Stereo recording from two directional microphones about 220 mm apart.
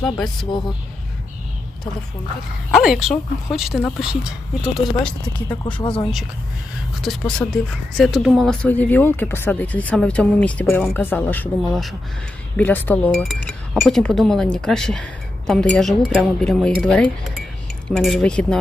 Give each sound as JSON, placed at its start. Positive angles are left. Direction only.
{"t": 2.7, "sound": "speech", "side_deg": 0}
{"t": 5.8, "sound": "speech", "side_deg": 20}
{"t": 7.0, "sound": "speech", "side_deg": 0}